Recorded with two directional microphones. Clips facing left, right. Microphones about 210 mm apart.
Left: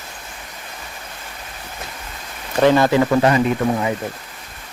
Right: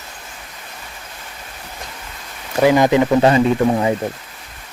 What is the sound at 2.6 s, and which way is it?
Speech, 15° right (ahead or behind).